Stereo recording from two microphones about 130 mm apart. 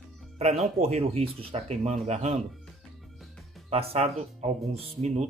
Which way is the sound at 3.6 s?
50° right (ahead or behind).